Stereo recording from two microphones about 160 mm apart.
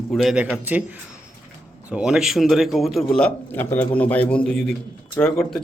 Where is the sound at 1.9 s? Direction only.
5° right (ahead or behind).